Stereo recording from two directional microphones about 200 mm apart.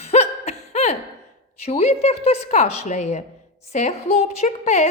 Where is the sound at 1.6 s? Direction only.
30° left (ahead or behind).